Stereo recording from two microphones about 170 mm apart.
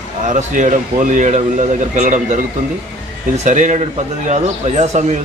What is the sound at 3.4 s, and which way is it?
Speech, 45° right (ahead or behind).